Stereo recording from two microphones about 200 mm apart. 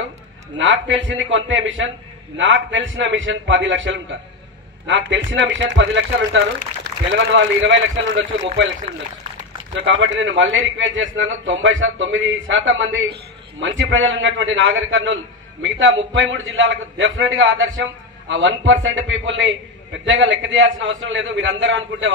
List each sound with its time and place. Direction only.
0.6 s a man's voice: 65° right (ahead or behind)
9.8 s a man's voice: 65° right (ahead or behind)